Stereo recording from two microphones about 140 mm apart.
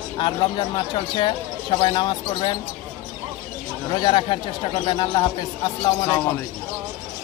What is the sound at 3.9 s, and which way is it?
Speech, 35° left (ahead or behind).